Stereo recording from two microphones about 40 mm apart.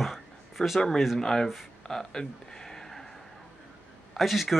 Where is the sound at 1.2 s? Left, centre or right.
Centre.